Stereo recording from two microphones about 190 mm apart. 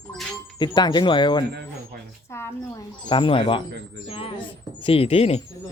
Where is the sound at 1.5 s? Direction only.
60° right (ahead or behind).